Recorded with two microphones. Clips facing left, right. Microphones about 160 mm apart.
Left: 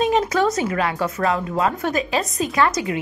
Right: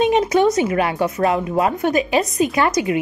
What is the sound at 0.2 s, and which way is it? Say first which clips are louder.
Speech: right 4 dB; 20° right (ahead or behind).